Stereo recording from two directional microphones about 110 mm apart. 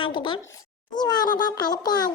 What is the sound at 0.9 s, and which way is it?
A child's voice, 40° left (ahead or behind).